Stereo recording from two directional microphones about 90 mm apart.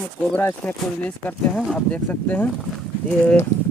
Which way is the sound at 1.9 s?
20° left (ahead or behind).